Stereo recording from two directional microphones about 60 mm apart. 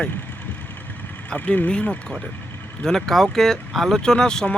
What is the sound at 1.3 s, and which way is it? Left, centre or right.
Speech, centre.